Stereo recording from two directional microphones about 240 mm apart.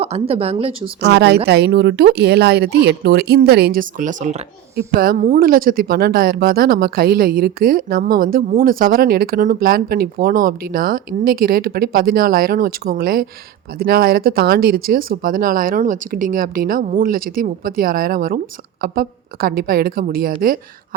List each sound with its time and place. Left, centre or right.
0.0 s speech: right
1.0 s speech: right